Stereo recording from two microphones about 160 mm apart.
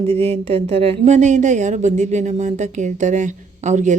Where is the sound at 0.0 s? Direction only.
35° right (ahead or behind).